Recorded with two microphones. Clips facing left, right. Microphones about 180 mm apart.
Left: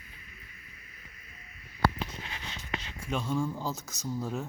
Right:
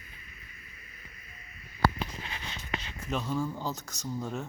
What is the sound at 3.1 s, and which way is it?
Speech, 5° right (ahead or behind).